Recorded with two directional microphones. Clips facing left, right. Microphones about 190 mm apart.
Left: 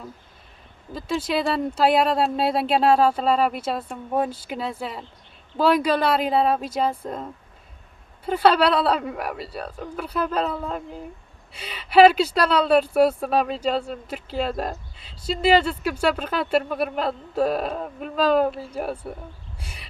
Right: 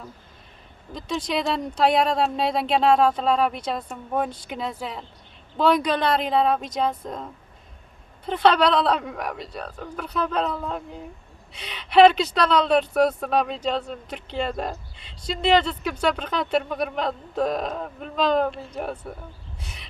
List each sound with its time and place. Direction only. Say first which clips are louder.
0.9 s speech: left 2 dB; 5° left (ahead or behind)